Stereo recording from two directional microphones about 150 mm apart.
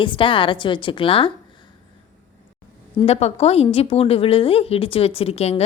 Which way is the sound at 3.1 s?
45° left (ahead or behind).